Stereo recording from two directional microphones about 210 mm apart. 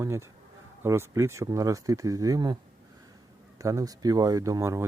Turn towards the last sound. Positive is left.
turn(degrees=-15)  # may be behind; listen again after turning